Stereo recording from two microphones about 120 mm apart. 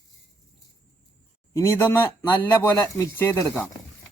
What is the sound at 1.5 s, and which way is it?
Speech, 20° left (ahead or behind).